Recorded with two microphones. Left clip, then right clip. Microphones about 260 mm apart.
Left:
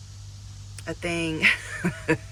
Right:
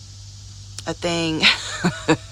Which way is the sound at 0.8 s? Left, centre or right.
Centre.